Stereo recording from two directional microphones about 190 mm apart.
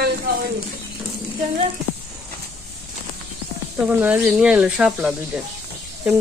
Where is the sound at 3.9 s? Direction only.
10° right (ahead or behind).